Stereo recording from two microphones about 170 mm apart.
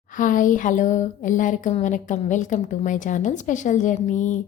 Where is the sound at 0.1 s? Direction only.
50° left (ahead or behind).